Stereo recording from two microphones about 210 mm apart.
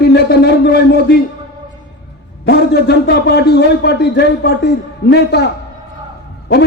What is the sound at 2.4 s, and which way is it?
A man's voice, 50° left (ahead or behind).